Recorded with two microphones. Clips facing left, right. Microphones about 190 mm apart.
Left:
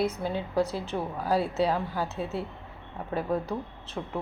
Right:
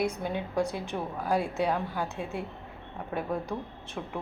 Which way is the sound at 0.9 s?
Centre (ahead or behind).